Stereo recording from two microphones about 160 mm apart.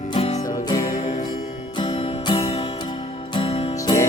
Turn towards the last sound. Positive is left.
turn(degrees=25)  # may be behind; listen again after turning